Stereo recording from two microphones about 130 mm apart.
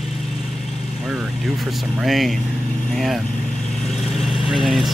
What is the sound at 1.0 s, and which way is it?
Speech, 10° right (ahead or behind).